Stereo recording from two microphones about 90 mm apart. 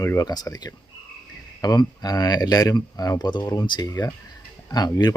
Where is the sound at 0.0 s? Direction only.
35° left (ahead or behind).